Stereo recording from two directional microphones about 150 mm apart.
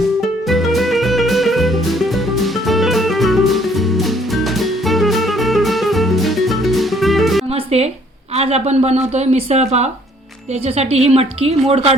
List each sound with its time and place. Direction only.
0.4 s music: centre (ahead or behind)
7.5 s music: 45° right (ahead or behind)
8.4 s speech: 45° right (ahead or behind)